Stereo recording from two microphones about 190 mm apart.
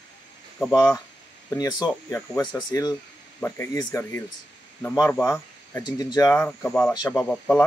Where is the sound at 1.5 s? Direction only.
20° left (ahead or behind).